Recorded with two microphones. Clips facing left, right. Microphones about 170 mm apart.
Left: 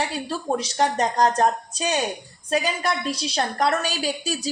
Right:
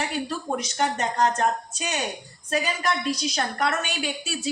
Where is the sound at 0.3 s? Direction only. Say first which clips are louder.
Left 3 dB; 30° left (ahead or behind).